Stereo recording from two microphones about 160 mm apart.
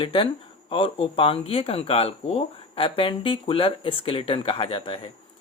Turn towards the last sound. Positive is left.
turn(degrees=35)  # may be behind; listen again after turning